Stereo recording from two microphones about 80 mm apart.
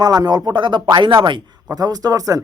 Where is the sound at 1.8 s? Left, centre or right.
Right.